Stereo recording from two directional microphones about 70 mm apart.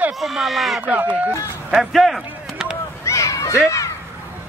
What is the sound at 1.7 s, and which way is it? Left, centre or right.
Speech, centre.